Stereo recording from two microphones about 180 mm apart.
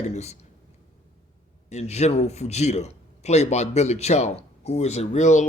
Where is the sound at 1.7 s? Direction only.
40° left (ahead or behind).